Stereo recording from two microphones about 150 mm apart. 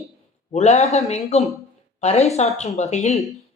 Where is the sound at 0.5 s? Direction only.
45° left (ahead or behind).